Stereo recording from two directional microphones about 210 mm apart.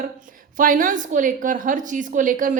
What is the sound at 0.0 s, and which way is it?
A woman's voice, 40° right (ahead or behind).